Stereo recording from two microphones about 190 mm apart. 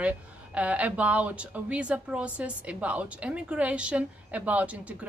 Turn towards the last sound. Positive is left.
turn(degrees=-5)  # may be behind; listen again after turning